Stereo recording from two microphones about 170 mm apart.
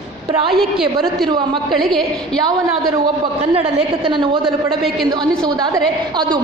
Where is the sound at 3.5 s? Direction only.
35° right (ahead or behind).